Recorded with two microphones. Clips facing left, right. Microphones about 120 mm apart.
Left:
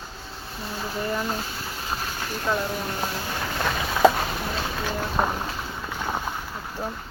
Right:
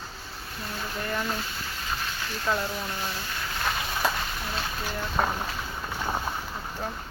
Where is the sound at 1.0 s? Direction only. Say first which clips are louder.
Left 3 dB; 15° left (ahead or behind).